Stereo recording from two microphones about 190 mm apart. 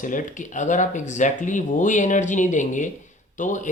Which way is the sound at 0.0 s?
45° left (ahead or behind).